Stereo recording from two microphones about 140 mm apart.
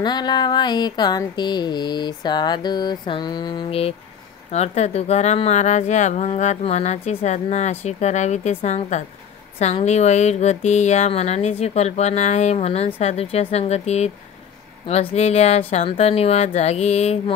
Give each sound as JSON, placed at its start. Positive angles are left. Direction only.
{"t": 0.0, "sound": "a sound", "side_deg": 30}
{"t": 4.5, "sound": "speech", "side_deg": 50}
{"t": 15.1, "sound": "speech", "side_deg": 45}